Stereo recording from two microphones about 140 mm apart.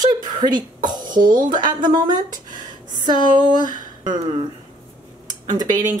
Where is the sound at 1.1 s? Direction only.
75° right (ahead or behind).